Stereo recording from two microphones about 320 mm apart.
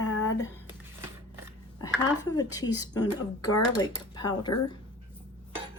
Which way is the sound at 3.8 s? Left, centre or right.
Centre.